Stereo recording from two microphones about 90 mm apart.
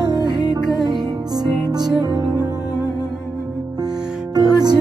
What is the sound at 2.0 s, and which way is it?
Music, 50° right (ahead or behind).